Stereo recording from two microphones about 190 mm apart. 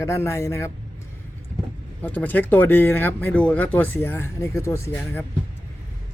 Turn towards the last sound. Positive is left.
turn(degrees=10)  # may be behind; listen again after turning